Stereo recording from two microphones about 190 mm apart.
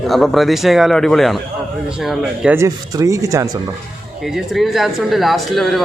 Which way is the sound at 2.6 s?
20° right (ahead or behind).